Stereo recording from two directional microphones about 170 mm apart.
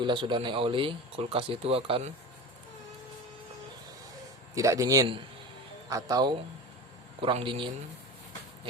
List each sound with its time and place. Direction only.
0.0 s speech: 30° right (ahead or behind)
4.5 s a man's voice: 20° right (ahead or behind)